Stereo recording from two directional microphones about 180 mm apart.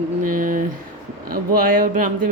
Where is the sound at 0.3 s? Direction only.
50° right (ahead or behind).